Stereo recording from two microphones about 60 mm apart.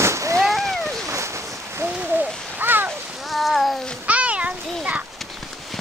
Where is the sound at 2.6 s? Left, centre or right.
Right.